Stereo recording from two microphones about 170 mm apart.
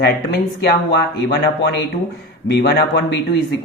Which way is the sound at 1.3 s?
70° left (ahead or behind).